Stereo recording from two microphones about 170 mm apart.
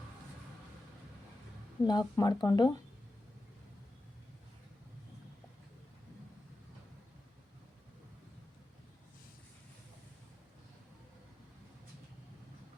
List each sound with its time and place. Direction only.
1.8 s speech: 25° left (ahead or behind)